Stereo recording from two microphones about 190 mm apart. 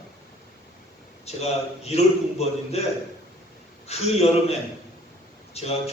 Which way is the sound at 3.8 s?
35° left (ahead or behind).